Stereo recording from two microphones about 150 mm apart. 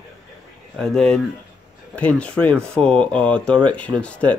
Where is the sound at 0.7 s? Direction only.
5° left (ahead or behind).